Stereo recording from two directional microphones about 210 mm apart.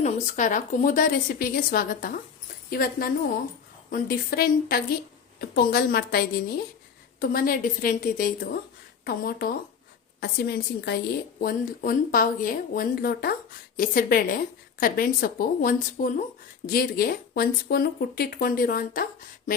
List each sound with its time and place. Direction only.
0.0 s a woman's voice: 35° left (ahead or behind)